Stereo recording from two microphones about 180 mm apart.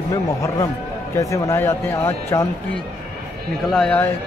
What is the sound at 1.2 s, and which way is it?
A man's voice, 15° left (ahead or behind).